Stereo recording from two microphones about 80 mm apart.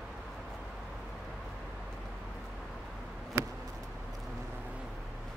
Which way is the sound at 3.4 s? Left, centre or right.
Right.